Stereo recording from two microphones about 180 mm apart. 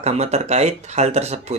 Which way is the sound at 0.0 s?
35° right (ahead or behind).